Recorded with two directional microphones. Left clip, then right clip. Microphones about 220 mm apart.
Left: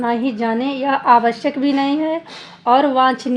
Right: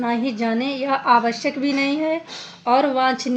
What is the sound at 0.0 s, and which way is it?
A woman's voice, 30° left (ahead or behind).